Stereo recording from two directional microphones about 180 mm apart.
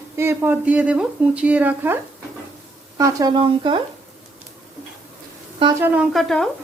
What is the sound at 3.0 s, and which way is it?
Speech, 20° right (ahead or behind).